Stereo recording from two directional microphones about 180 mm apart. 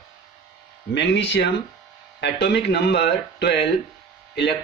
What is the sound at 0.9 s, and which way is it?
Speech, 75° left (ahead or behind).